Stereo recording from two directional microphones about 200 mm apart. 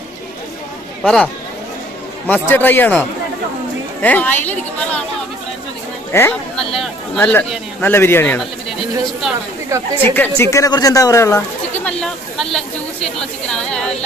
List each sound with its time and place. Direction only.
1.0 s speech: centre (ahead or behind)
6.1 s speech: 10° left (ahead or behind)
10.0 s speech: 10° left (ahead or behind)